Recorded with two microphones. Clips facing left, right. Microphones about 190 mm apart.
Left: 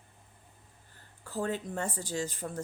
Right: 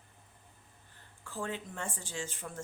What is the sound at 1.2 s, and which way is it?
Speech, 40° left (ahead or behind).